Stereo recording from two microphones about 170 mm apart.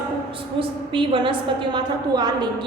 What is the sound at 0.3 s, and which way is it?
A woman's voice, 30° right (ahead or behind).